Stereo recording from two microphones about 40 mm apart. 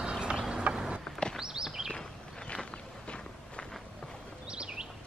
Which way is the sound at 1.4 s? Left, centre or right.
Centre.